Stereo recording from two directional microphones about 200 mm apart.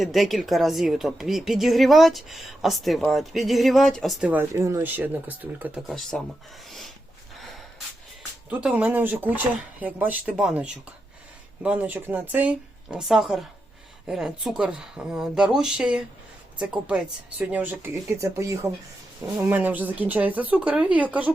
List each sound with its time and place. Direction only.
0.0 s a woman's voice: centre (ahead or behind)
6.7 s a sound: centre (ahead or behind)
8.4 s a woman's voice: 5° right (ahead or behind)